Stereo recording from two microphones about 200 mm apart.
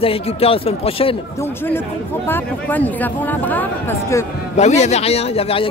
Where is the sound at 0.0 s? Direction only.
30° left (ahead or behind).